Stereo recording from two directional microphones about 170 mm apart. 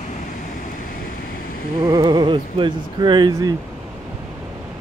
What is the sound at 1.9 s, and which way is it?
Speech, 25° right (ahead or behind).